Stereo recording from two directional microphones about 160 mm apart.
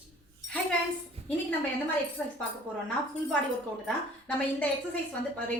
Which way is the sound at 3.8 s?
5° left (ahead or behind).